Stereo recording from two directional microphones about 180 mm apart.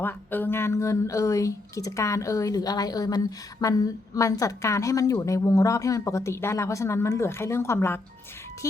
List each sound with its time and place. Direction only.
0.0 s speech: 10° left (ahead or behind)